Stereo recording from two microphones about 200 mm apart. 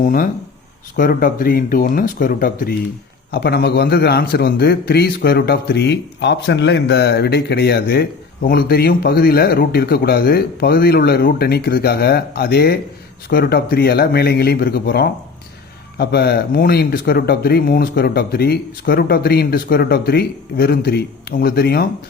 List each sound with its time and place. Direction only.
0.0 s a man's voice: 45° left (ahead or behind)